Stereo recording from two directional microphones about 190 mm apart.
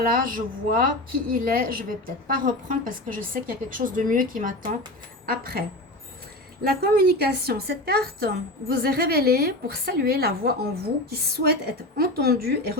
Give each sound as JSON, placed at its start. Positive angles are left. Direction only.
{"t": 0.0, "sound": "a woman's voice", "side_deg": -50}
{"t": 6.8, "sound": "a woman's voice", "side_deg": -55}